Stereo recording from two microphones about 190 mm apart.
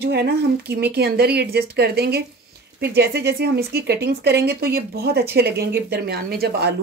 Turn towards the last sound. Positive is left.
turn(degrees=-55)  # may be behind; listen again after turning